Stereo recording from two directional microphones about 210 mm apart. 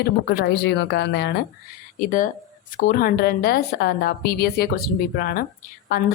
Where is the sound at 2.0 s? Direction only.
40° left (ahead or behind).